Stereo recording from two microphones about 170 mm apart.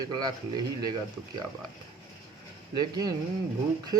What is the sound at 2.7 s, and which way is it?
Speech, 25° right (ahead or behind).